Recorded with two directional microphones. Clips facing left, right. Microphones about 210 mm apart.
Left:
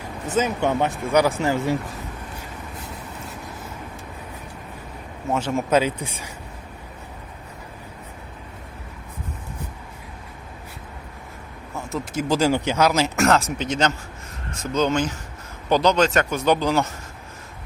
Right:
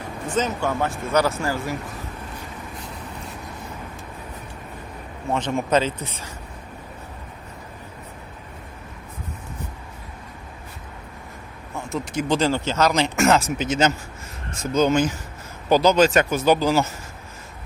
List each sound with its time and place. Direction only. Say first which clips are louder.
0.3 s speech: left 2 dB; 15° left (ahead or behind)
5.3 s speech: left 1 dB; 5° left (ahead or behind)
11.9 s speech: even; centre (ahead or behind)